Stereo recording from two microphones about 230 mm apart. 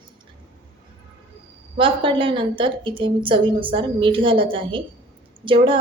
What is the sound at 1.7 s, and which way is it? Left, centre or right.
A woman's voice, right.